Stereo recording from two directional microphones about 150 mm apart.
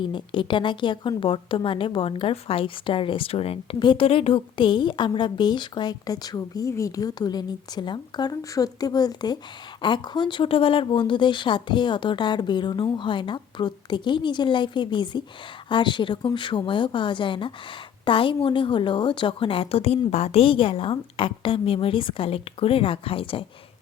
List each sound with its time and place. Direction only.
0.0 s a woman's voice: 35° left (ahead or behind)